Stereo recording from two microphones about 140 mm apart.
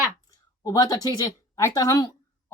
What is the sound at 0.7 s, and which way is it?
Speech, 25° left (ahead or behind).